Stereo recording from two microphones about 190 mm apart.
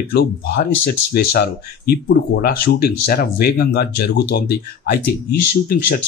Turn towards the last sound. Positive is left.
turn(degrees=50)  # may be behind; listen again after turning